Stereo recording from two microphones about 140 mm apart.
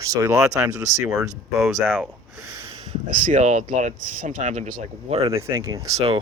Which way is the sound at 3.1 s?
65° right (ahead or behind).